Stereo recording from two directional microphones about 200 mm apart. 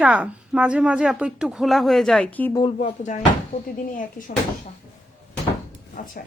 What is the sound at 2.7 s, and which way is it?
A woman's voice, 35° left (ahead or behind).